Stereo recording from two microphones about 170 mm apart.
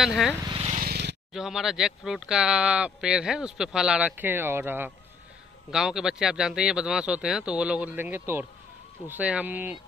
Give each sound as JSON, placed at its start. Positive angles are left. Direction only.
{"t": 0.0, "sound": "speech", "side_deg": 0}
{"t": 0.7, "sound": "a sound", "side_deg": -60}
{"t": 1.3, "sound": "speech", "side_deg": 0}